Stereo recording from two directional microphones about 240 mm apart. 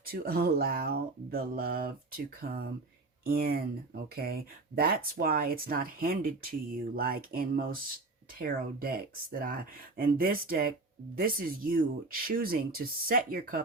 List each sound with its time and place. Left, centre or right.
0.0 s speech: right